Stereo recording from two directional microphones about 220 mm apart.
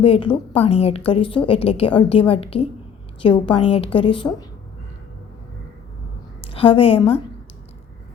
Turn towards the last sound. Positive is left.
turn(degrees=25)  # may be behind; listen again after turning